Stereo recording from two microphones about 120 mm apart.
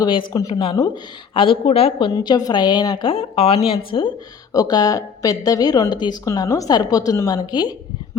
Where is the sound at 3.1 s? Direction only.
50° left (ahead or behind).